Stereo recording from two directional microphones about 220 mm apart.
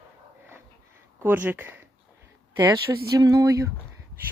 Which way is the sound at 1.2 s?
10° right (ahead or behind).